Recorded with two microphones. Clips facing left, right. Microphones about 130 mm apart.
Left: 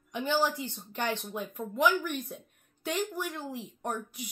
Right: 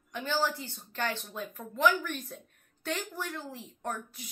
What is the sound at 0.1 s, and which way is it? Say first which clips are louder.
Speech: left 2 dB; 15° left (ahead or behind).